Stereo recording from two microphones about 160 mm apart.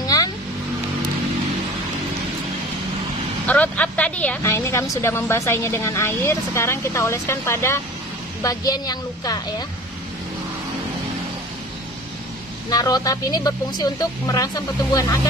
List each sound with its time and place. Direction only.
0.0 s vehicle: 25° left (ahead or behind)
3.4 s a woman's voice: 10° left (ahead or behind)
12.6 s speech: 25° left (ahead or behind)